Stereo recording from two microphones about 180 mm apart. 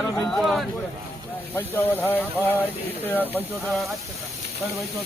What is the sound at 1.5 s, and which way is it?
Speech, 10° left (ahead or behind).